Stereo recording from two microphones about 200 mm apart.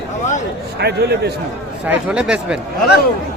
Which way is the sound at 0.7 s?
55° right (ahead or behind).